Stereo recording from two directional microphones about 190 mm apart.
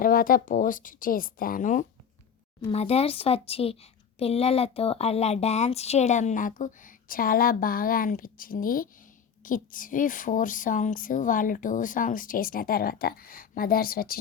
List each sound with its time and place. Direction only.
0.0 s speech: 50° left (ahead or behind)